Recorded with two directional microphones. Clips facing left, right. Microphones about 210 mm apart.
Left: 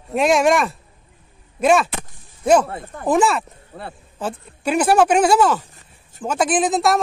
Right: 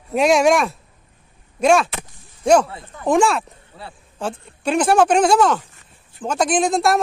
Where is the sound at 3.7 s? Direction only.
55° left (ahead or behind).